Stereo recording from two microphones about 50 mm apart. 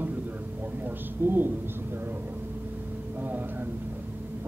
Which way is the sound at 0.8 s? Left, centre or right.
Right.